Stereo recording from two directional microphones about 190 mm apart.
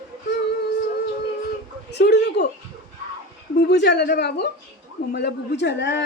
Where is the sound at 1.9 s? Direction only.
65° left (ahead or behind).